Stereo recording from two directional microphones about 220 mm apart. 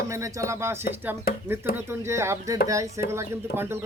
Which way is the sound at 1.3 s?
45° left (ahead or behind).